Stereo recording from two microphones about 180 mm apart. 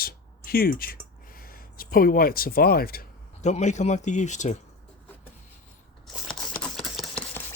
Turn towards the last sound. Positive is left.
turn(degrees=0)  # may be behind; listen again after turning